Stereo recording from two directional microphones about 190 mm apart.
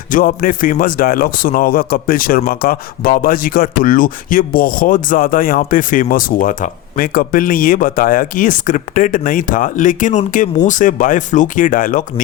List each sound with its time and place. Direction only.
0.1 s speech: 45° left (ahead or behind)